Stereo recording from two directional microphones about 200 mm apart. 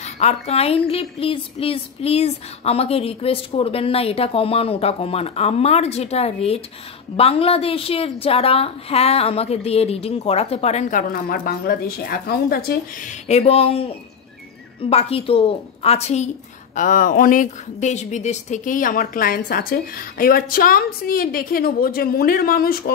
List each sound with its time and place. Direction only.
0.0 s a woman's voice: 35° left (ahead or behind); by 13.1 s 50° left (ahead or behind)
13.3 s a woman's voice: 30° left (ahead or behind); by 22.9 s 50° left (ahead or behind)